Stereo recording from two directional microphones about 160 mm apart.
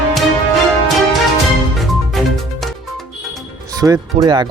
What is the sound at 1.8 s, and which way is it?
Music, centre (ahead or behind).